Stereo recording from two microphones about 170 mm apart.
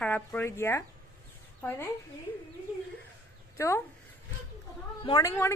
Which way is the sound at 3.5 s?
15° left (ahead or behind).